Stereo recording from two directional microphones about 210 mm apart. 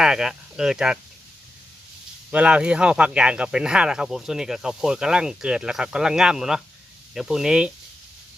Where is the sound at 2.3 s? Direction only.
5° right (ahead or behind).